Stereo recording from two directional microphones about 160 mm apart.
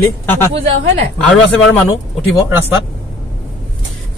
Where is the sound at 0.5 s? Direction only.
40° right (ahead or behind).